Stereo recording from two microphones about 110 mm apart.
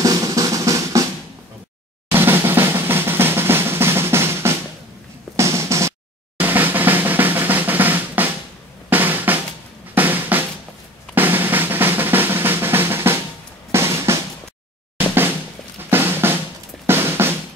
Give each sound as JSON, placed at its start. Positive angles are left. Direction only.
{"t": 0.0, "sound": "drum", "side_deg": -35}
{"t": 2.1, "sound": "drum", "side_deg": -20}
{"t": 5.3, "sound": "music", "side_deg": -25}
{"t": 6.4, "sound": "drum", "side_deg": -15}